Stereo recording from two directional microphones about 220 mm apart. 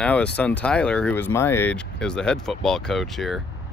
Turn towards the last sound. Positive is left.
turn(degrees=0)  # may be behind; listen again after turning